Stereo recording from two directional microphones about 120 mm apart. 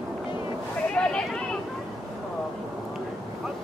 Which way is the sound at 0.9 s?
5° left (ahead or behind).